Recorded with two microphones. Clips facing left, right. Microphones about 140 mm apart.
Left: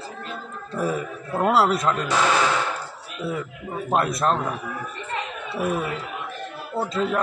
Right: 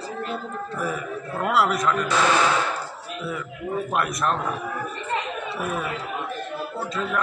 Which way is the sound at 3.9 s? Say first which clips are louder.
Left 6 dB; 30° left (ahead or behind).